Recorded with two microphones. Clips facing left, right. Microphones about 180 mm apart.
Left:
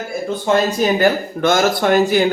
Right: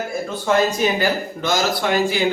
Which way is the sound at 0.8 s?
50° left (ahead or behind).